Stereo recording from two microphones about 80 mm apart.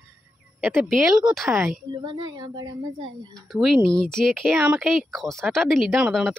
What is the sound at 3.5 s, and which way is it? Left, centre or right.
A woman's voice, centre.